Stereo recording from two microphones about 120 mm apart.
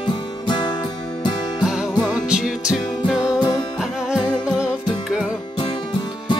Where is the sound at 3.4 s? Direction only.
35° left (ahead or behind).